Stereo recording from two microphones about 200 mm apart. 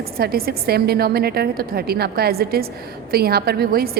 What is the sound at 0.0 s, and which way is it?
A woman's voice, 50° right (ahead or behind).